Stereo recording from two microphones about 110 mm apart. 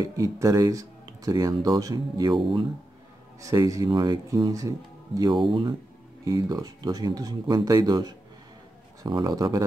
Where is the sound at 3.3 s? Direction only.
30° right (ahead or behind).